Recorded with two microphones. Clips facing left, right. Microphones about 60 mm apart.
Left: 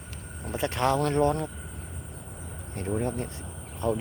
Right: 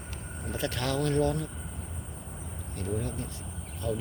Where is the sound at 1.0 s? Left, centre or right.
Left.